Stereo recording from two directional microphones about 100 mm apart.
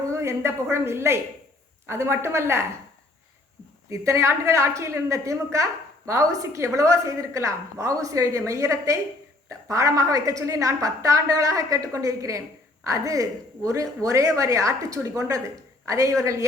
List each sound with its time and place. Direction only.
0.1 s a woman's voice: 30° right (ahead or behind)
3.8 s a woman's voice: 30° right (ahead or behind)